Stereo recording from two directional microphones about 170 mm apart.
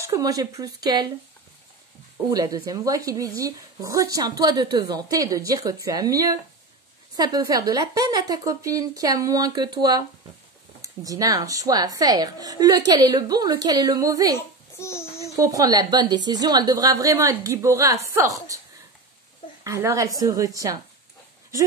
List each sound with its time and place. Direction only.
0.0 s speech: 20° right (ahead or behind)
2.2 s speech: 20° right (ahead or behind)
14.8 s a sound: 15° left (ahead or behind)
15.0 s a sound: 35° left (ahead or behind)
15.3 s speech: 20° right (ahead or behind)
19.6 s speech: 15° right (ahead or behind)